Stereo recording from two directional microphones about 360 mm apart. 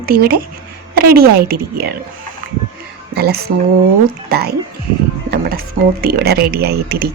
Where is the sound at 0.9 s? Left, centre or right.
Right.